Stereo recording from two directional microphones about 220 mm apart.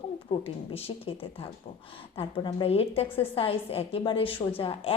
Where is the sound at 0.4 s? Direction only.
25° left (ahead or behind).